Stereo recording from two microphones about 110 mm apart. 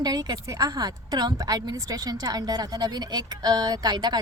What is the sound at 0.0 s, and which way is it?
A woman's voice, 35° right (ahead or behind).